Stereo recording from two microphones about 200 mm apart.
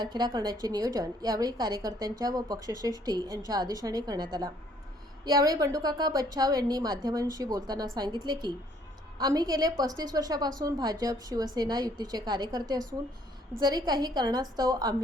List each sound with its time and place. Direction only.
0.0 s a woman's voice: 20° right (ahead or behind)